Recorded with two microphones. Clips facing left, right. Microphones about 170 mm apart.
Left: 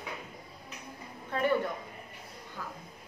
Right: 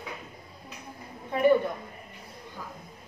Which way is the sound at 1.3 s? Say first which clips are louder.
Right 7 dB; 15° right (ahead or behind).